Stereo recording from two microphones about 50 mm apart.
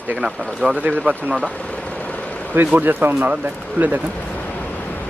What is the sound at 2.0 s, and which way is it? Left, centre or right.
Vehicle, left.